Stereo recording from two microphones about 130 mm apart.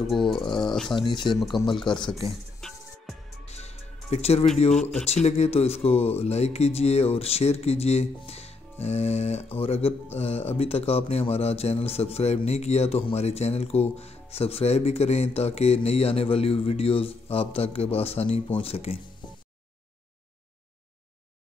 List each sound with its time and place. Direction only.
0.0 s speech: centre (ahead or behind)
0.4 s speech: 35° left (ahead or behind)
2.6 s music: 5° left (ahead or behind)
3.4 s music: 55° left (ahead or behind)
5.0 s a man's voice: 55° left (ahead or behind)